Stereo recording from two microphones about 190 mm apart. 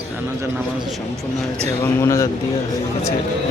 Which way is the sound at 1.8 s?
15° left (ahead or behind).